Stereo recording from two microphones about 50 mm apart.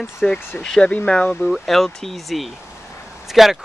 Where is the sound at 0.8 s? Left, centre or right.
Left.